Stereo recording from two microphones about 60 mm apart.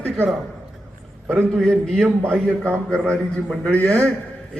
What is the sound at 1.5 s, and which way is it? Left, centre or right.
Speech, centre.